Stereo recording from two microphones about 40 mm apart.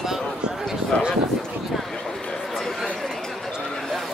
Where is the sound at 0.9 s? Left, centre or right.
Left.